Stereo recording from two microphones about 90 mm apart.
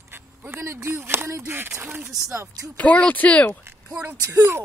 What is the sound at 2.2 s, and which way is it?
Speech, 35° right (ahead or behind).